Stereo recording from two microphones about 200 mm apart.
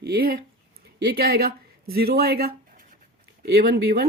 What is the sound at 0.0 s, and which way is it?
Speech, 50° right (ahead or behind).